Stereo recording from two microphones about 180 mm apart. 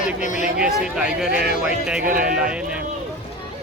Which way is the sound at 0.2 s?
45° left (ahead or behind).